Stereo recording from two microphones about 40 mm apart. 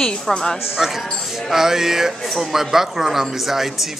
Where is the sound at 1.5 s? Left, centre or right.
Centre.